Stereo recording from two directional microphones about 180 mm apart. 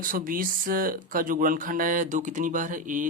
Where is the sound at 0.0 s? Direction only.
50° right (ahead or behind).